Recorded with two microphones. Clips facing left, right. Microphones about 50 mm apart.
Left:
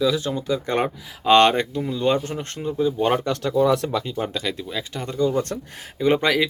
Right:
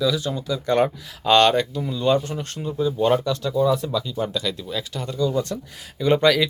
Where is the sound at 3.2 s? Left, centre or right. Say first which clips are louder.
Even; left.